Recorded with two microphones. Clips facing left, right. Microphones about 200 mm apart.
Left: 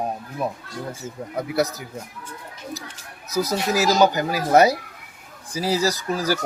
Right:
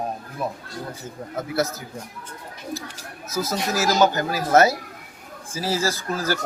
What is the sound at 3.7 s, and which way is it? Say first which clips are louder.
Speech: left 1 dB; 15° left (ahead or behind).